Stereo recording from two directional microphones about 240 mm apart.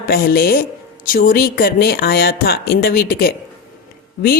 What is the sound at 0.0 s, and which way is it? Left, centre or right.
A woman's voice, left.